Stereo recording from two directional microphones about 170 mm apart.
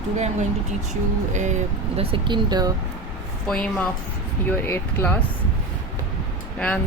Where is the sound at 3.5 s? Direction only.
5° left (ahead or behind).